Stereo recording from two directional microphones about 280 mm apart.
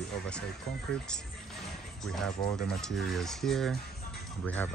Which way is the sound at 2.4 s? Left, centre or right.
Centre.